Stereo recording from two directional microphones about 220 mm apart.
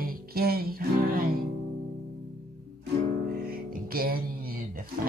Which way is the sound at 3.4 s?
45° right (ahead or behind).